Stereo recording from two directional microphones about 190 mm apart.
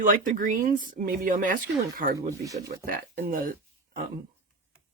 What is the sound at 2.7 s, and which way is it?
Speech, 50° right (ahead or behind).